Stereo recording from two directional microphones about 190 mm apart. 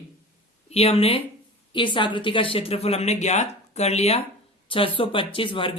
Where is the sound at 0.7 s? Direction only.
30° left (ahead or behind).